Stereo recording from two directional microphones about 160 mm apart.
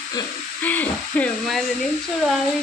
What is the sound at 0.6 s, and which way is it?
Speech, 10° left (ahead or behind).